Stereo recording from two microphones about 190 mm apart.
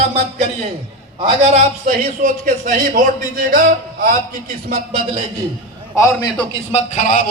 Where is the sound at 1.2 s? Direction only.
30° right (ahead or behind).